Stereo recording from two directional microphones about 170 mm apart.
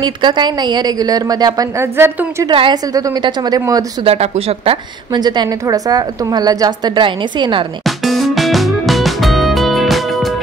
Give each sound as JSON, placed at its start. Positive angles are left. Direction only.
{"t": 0.0, "sound": "a woman's voice", "side_deg": -25}
{"t": 2.4, "sound": "a woman's voice", "side_deg": -25}
{"t": 4.0, "sound": "a woman's voice", "side_deg": -35}
{"t": 7.8, "sound": "music", "side_deg": 0}